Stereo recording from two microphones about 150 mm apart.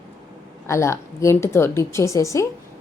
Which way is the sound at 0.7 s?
20° left (ahead or behind).